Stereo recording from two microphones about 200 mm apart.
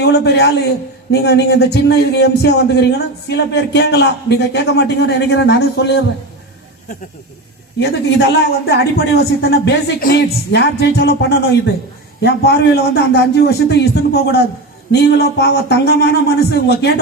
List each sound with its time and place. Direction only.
0.0 s a man's voice: 55° left (ahead or behind)
8.6 s a man's voice: 55° left (ahead or behind)